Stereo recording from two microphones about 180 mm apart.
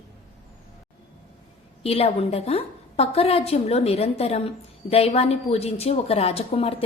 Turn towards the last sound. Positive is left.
turn(degrees=35)  # may be behind; listen again after turning